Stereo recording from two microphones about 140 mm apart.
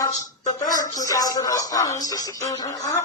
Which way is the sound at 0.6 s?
25° left (ahead or behind).